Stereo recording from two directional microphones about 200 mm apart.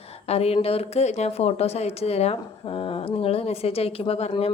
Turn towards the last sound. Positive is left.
turn(degrees=30)  # may be behind; listen again after turning